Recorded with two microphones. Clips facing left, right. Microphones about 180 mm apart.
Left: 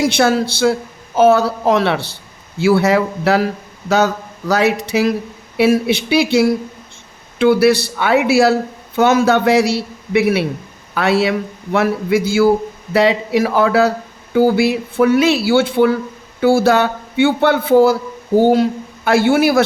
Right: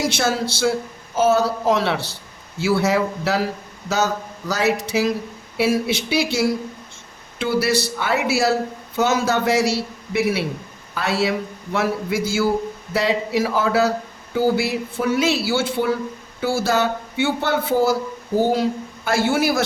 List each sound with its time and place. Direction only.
0.0 s a man's voice: 60° left (ahead or behind)
19.0 s a man's voice: 60° left (ahead or behind)